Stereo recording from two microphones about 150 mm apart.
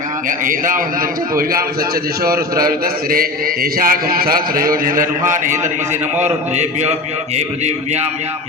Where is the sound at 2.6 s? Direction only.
75° right (ahead or behind); by 8.0 s 50° right (ahead or behind).